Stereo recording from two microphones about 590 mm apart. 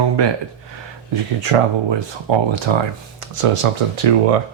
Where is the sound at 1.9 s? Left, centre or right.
Right.